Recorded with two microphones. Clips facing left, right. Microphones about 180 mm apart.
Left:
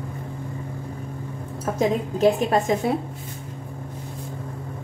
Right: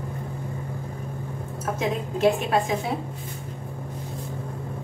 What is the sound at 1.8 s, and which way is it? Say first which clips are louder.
Speech: left 4 dB; 40° left (ahead or behind).